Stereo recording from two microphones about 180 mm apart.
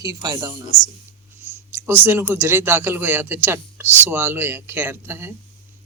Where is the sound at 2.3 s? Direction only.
15° right (ahead or behind).